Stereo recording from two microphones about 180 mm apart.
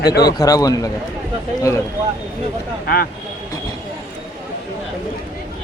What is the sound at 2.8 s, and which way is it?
Speech, 55° left (ahead or behind).